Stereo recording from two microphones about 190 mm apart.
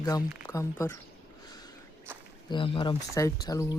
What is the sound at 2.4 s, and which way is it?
Speech, 25° left (ahead or behind).